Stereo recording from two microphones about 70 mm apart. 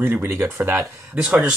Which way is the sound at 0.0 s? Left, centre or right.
Right.